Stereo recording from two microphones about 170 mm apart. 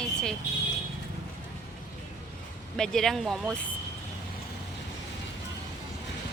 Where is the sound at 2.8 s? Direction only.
5° left (ahead or behind).